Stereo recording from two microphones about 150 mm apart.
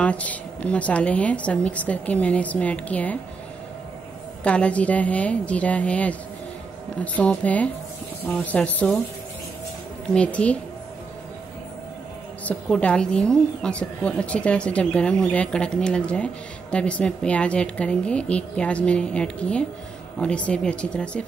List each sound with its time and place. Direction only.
0.0 s a woman's voice: 10° left (ahead or behind)
4.4 s a woman's voice: 10° left (ahead or behind)
7.2 s a woman's voice: 10° left (ahead or behind)
10.1 s a woman's voice: 10° left (ahead or behind)
12.4 s a woman's voice: 10° left (ahead or behind)